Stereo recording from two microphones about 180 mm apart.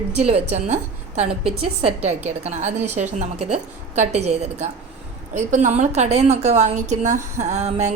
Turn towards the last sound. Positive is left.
turn(degrees=-35)  # may be behind; listen again after turning